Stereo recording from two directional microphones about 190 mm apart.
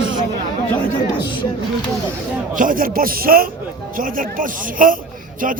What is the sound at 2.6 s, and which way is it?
A man's voice, 45° right (ahead or behind).